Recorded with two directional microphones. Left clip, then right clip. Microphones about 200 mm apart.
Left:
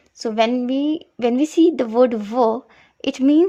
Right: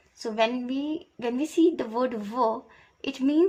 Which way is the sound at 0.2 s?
50° left (ahead or behind).